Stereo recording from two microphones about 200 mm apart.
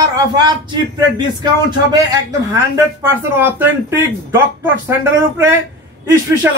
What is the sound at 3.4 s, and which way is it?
Speech, 10° right (ahead or behind).